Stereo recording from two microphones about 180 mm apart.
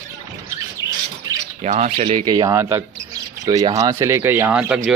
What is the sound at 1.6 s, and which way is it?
Speech, 40° right (ahead or behind).